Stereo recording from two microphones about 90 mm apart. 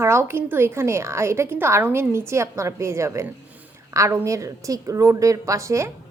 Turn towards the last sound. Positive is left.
turn(degrees=-35)  # may be behind; listen again after turning